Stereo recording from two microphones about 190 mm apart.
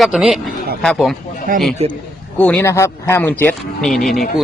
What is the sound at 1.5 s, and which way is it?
Speech, 45° right (ahead or behind).